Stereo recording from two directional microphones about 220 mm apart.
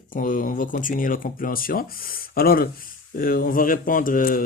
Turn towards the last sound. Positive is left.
turn(degrees=40)  # may be behind; listen again after turning